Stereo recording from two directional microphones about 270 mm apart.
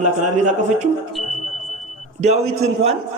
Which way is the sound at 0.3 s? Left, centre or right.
Right.